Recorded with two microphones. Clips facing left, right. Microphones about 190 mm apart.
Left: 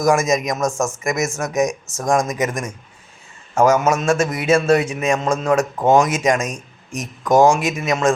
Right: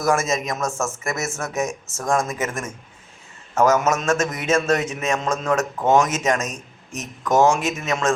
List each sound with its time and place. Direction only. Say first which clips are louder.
0.0 s a man's voice: left 4 dB; 15° left (ahead or behind)